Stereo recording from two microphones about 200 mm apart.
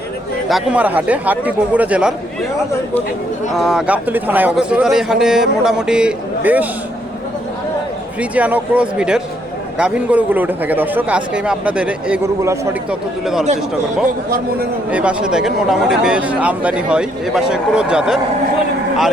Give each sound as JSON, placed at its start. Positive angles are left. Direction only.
{"t": 0.4, "sound": "a man's voice", "side_deg": -5}
{"t": 3.5, "sound": "speech", "side_deg": 0}
{"t": 8.2, "sound": "a man's voice", "side_deg": -5}
{"t": 14.3, "sound": "a man's voice", "side_deg": -50}
{"t": 14.8, "sound": "speech", "side_deg": -5}